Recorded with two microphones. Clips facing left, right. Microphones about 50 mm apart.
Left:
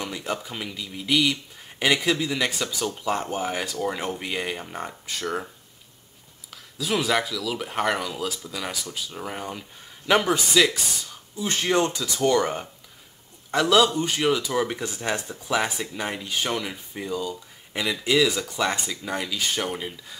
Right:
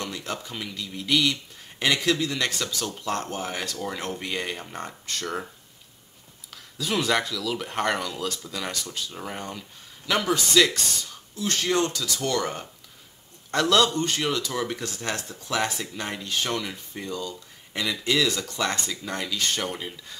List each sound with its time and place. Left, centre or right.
0.0 s speech: centre
6.5 s speech: centre
11.3 s speech: centre